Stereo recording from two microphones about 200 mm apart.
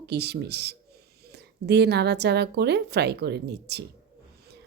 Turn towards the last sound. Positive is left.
turn(degrees=-55)  # may be behind; listen again after turning